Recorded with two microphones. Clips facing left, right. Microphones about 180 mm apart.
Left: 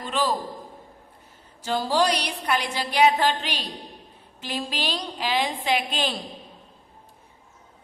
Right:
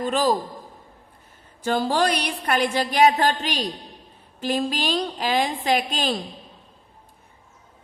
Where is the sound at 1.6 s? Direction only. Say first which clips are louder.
Right 1 dB; 55° right (ahead or behind).